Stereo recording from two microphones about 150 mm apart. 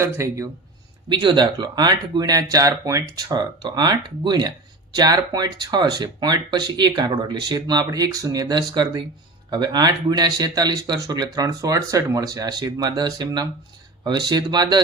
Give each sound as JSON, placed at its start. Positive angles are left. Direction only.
{"t": 0.0, "sound": "speech", "side_deg": -20}
{"t": 1.1, "sound": "speech", "side_deg": -30}